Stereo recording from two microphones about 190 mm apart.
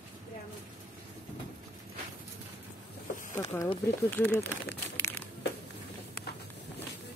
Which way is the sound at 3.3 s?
15° left (ahead or behind).